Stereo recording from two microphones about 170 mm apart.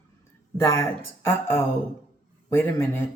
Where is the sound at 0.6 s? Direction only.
15° left (ahead or behind).